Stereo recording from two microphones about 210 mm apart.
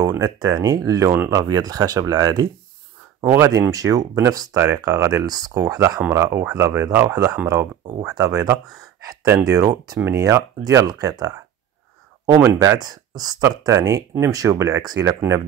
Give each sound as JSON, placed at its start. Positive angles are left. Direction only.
{"t": 0.0, "sound": "speech", "side_deg": -15}
{"t": 12.4, "sound": "speech", "side_deg": -20}